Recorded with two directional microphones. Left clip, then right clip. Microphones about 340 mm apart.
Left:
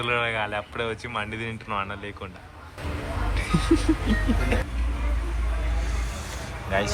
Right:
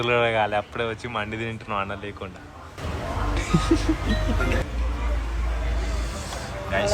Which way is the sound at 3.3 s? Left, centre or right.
Centre.